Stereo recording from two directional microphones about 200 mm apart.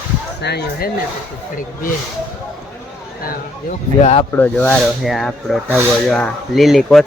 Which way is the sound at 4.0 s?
35° left (ahead or behind).